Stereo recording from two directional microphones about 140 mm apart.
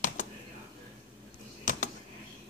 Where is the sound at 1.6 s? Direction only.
65° left (ahead or behind).